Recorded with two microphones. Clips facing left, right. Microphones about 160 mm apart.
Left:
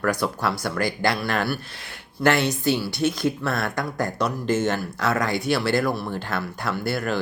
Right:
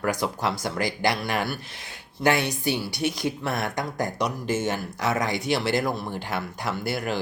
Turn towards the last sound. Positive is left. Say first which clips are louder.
# left 2 dB
turn(degrees=-15)  # may be behind; listen again after turning